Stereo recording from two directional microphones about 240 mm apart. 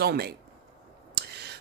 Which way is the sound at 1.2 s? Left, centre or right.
Right.